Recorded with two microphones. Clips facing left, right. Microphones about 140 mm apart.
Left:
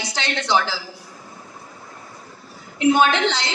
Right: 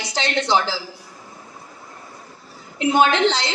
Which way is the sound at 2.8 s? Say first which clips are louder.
Even; 30° right (ahead or behind).